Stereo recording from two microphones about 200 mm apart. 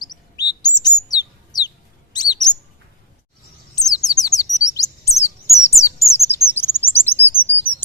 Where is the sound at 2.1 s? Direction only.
20° left (ahead or behind).